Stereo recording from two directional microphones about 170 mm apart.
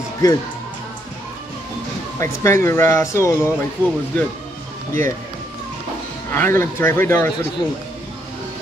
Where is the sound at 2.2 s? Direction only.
15° left (ahead or behind).